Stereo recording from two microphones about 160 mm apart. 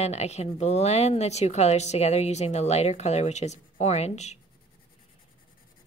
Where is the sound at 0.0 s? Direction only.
40° left (ahead or behind).